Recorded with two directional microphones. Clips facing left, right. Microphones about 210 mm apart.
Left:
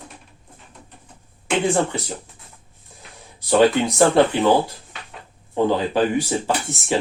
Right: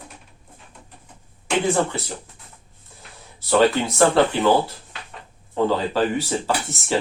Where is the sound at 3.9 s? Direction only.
15° left (ahead or behind).